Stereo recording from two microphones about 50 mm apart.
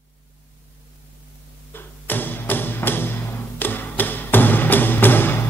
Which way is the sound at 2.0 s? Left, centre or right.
Left.